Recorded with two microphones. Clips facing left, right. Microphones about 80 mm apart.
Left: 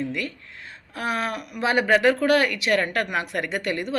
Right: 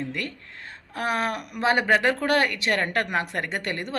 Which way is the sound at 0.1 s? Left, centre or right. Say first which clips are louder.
Left 2 dB; right.